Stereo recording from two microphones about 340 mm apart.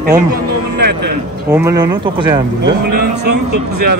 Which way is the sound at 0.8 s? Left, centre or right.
Right.